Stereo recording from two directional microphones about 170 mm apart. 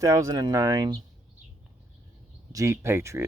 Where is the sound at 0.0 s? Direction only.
20° right (ahead or behind).